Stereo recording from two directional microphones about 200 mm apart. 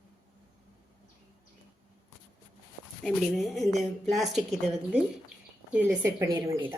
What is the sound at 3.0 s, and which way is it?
A woman's voice, centre (ahead or behind).